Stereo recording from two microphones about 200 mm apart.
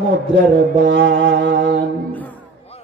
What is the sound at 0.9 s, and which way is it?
Music, 65° right (ahead or behind).